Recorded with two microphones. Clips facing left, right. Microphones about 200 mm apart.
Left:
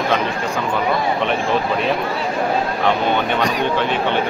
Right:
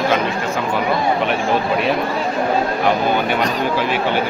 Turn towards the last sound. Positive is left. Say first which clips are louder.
# even
turn(degrees=-5)  # may be behind; listen again after turning